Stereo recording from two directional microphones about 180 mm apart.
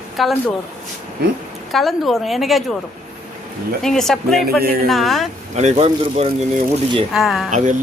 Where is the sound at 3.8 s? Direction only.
Centre (ahead or behind).